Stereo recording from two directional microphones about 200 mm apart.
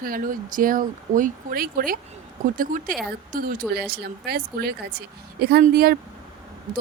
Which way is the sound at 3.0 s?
45° right (ahead or behind).